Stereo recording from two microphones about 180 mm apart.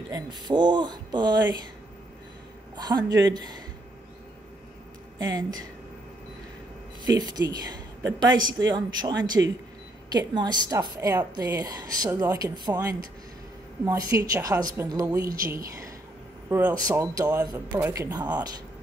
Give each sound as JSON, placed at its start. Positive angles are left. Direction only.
{"t": 0.1, "sound": "a woman's voice", "side_deg": -25}
{"t": 2.7, "sound": "a man's voice", "side_deg": -25}
{"t": 5.2, "sound": "a woman's voice", "side_deg": -20}
{"t": 7.1, "sound": "a woman's voice", "side_deg": -20}
{"t": 9.4, "sound": "speech", "side_deg": -10}
{"t": 10.1, "sound": "a woman's voice", "side_deg": -25}
{"t": 13.8, "sound": "a woman's voice", "side_deg": -20}
{"t": 18.1, "sound": "a woman's voice", "side_deg": -20}